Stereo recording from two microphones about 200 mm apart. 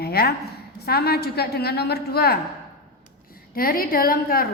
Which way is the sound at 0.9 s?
50° left (ahead or behind).